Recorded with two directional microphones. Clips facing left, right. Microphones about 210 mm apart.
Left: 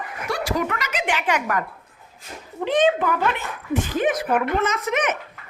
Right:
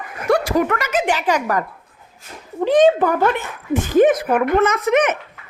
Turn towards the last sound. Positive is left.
turn(degrees=-55)  # may be behind; listen again after turning